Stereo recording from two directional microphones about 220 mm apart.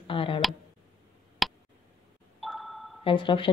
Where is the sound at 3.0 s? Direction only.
20° left (ahead or behind).